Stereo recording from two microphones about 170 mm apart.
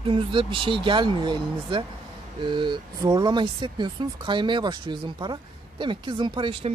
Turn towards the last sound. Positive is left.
turn(degrees=-30)  # may be behind; listen again after turning